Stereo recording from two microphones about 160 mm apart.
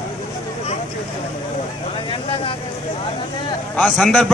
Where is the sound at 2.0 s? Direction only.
35° left (ahead or behind).